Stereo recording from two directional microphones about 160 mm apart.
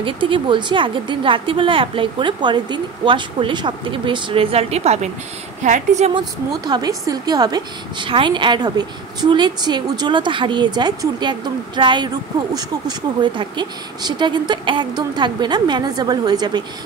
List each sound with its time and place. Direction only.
0.0 s a woman's voice: 30° right (ahead or behind); by 6.1 s 45° right (ahead or behind)
6.1 s speech: 25° right (ahead or behind)